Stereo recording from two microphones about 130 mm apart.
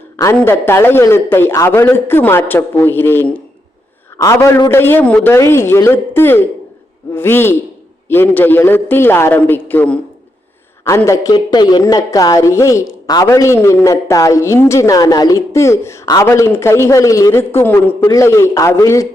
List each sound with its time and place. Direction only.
0.3 s a man's voice: 15° left (ahead or behind)
4.2 s a man's voice: 25° left (ahead or behind)
10.8 s a man's voice: 20° left (ahead or behind)